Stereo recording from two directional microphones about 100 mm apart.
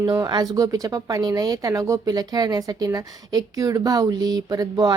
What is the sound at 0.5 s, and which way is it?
Speech, 35° right (ahead or behind).